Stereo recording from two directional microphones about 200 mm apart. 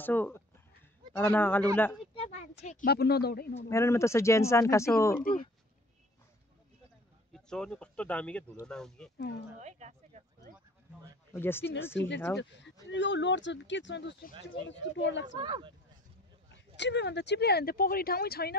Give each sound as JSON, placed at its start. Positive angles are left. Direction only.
{"t": 0.0, "sound": "speech", "side_deg": 10}
{"t": 2.1, "sound": "speech", "side_deg": 30}
{"t": 2.9, "sound": "speech", "side_deg": 55}
{"t": 3.6, "sound": "speech", "side_deg": 15}
{"t": 7.3, "sound": "speech", "side_deg": 5}
{"t": 9.6, "sound": "speech", "side_deg": -35}
{"t": 11.3, "sound": "speech", "side_deg": 10}
{"t": 12.4, "sound": "speech", "side_deg": 60}
{"t": 15.3, "sound": "speech", "side_deg": -25}
{"t": 16.7, "sound": "speech", "side_deg": 60}